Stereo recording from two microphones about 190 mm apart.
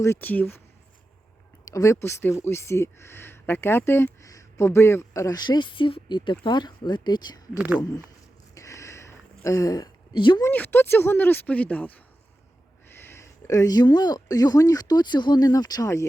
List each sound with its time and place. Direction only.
0.0 s speech: 10° left (ahead or behind)
1.6 s speech: 15° left (ahead or behind)
8.5 s a sound: 15° left (ahead or behind)
10.5 s speech: 10° left (ahead or behind)